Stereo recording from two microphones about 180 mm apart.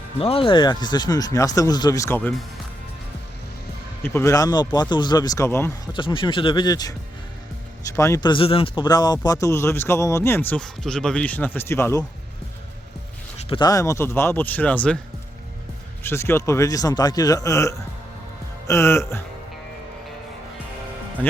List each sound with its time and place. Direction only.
0.2 s speech: 30° left (ahead or behind); by 2.3 s 10° left (ahead or behind)
4.0 s speech: 15° left (ahead or behind)
5.9 s speech: 25° left (ahead or behind)
7.9 s speech: 15° left (ahead or behind)
13.5 s speech: 20° left (ahead or behind)
16.0 s speech: 15° left (ahead or behind)